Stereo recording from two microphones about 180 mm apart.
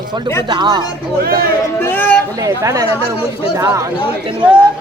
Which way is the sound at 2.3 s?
20° right (ahead or behind).